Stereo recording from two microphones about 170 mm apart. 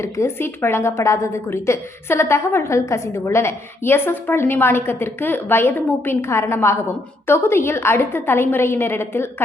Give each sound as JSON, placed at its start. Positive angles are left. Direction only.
{"t": 0.0, "sound": "a woman's voice", "side_deg": 15}